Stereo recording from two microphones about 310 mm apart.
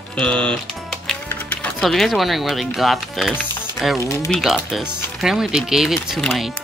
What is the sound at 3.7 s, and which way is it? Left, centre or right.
Speech, centre.